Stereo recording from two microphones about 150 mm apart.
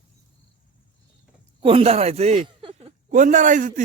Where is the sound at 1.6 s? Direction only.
40° right (ahead or behind).